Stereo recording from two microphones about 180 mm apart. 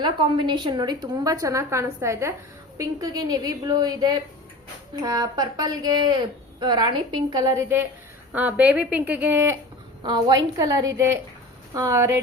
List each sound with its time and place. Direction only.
0.0 s a woman's voice: 25° right (ahead or behind)
10.0 s a woman's voice: 25° right (ahead or behind)